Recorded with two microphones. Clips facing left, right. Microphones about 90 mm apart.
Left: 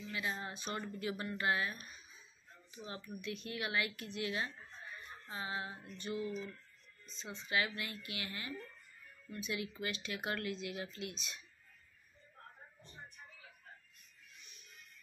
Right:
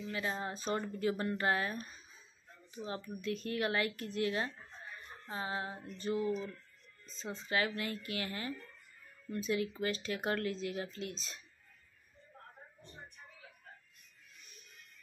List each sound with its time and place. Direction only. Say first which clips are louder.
0.1 s speech: right 3 dB; 35° right (ahead or behind)